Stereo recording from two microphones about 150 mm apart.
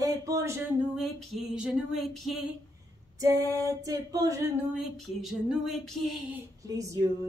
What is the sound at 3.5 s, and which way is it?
Speech, 20° right (ahead or behind).